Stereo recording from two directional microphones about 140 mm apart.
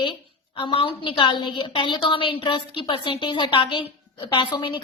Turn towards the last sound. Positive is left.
turn(degrees=35)  # may be behind; listen again after turning